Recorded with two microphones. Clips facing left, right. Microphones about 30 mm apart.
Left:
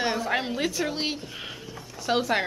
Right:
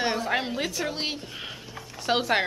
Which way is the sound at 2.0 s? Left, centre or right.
Centre.